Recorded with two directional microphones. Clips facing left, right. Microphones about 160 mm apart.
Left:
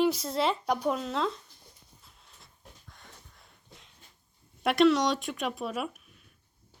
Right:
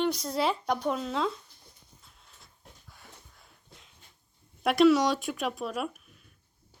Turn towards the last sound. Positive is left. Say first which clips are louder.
# right 1 dB
turn(degrees=0)  # may be behind; listen again after turning